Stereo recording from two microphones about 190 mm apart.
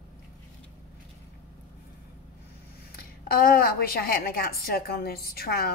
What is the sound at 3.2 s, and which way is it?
A woman's voice, 55° left (ahead or behind).